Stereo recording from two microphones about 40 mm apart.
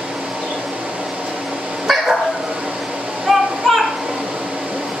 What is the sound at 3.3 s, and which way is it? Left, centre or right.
Children playing, centre.